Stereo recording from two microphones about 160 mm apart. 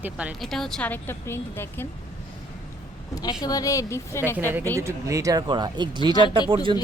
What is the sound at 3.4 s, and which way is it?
Speech, 25° left (ahead or behind).